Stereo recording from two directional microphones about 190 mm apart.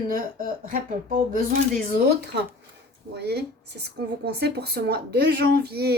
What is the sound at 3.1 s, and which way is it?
Speech, 60° right (ahead or behind).